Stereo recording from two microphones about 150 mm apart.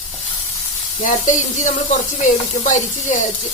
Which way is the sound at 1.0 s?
55° left (ahead or behind).